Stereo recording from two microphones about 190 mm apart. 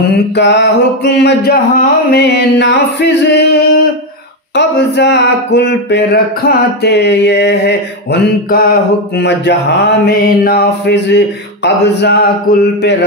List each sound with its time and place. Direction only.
0.1 s speech: 65° left (ahead or behind)